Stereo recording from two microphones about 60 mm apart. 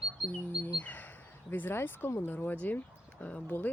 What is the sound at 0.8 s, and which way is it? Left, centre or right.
Speech, left.